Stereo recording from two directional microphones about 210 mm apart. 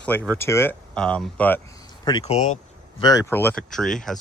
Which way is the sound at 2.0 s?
25° left (ahead or behind).